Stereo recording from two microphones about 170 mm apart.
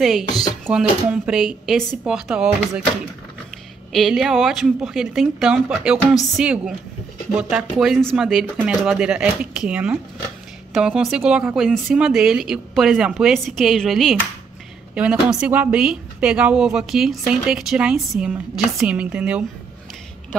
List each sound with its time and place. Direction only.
0.3 s speech: 25° left (ahead or behind)
0.7 s a woman's voice: 5° right (ahead or behind)
3.9 s a woman's voice: centre (ahead or behind)